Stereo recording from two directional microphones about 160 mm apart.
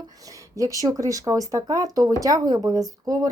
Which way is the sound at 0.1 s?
20° right (ahead or behind).